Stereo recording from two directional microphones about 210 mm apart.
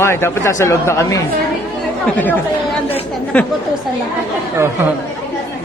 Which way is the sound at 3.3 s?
5° left (ahead or behind).